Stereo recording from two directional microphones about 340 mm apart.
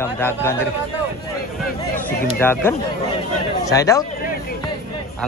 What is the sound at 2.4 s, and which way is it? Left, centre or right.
Speech, centre.